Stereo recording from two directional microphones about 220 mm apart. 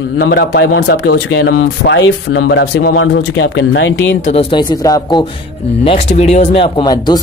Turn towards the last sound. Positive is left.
turn(degrees=20)  # may be behind; listen again after turning